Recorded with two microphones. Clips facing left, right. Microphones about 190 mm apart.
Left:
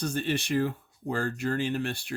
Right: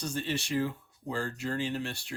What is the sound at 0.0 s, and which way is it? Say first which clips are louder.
Speech: left 4 dB; 55° left (ahead or behind).